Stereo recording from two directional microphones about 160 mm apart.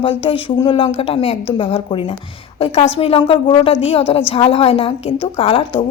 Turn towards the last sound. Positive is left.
turn(degrees=35)  # may be behind; listen again after turning